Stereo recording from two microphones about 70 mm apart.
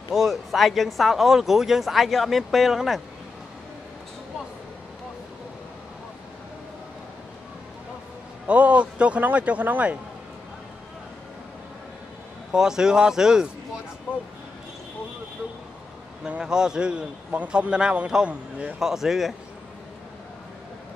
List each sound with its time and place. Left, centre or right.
0.1 s speech: centre
8.5 s a man's voice: centre
12.5 s a man's voice: centre
16.3 s a man's voice: centre
18.8 s speech: centre